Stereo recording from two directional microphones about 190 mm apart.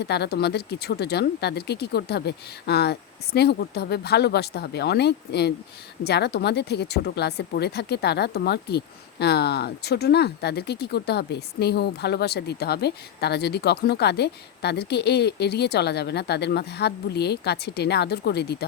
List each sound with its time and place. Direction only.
0.0 s speech: 60° left (ahead or behind)